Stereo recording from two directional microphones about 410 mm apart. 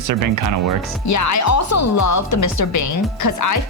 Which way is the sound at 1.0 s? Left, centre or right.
Left.